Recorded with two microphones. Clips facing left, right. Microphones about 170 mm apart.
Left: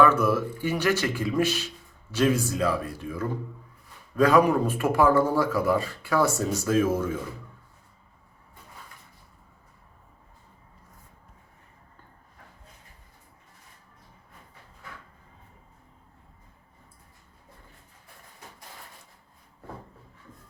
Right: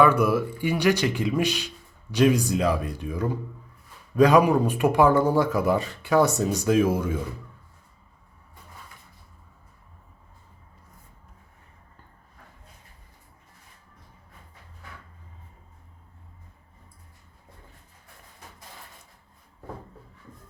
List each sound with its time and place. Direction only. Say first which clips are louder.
0.0 s speech: right 1 dB; 15° right (ahead or behind)